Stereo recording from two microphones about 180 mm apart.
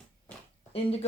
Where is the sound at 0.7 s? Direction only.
35° left (ahead or behind).